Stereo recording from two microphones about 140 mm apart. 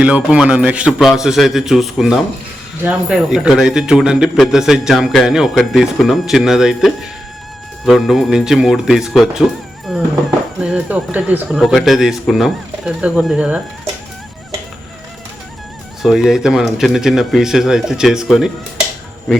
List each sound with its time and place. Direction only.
0.0 s speech: 10° right (ahead or behind)
16.0 s speech: 5° right (ahead or behind)